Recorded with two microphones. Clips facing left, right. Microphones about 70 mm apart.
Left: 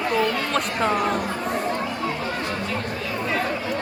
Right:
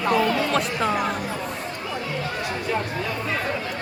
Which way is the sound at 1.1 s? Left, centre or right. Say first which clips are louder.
Left 4 dB; left.